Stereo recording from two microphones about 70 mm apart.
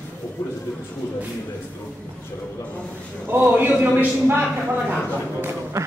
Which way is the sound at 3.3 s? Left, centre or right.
Right.